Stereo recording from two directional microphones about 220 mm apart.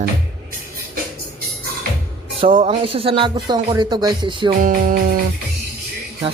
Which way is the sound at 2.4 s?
25° right (ahead or behind).